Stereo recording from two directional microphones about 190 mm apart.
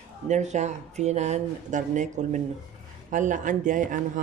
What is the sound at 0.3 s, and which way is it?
Speech, 40° right (ahead or behind).